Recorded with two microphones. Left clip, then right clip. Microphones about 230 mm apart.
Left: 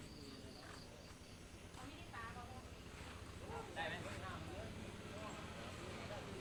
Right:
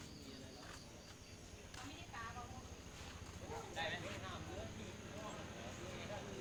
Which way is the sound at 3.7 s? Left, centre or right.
Right.